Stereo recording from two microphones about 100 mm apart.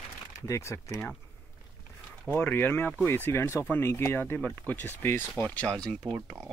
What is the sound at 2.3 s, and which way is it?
Speech, 20° left (ahead or behind).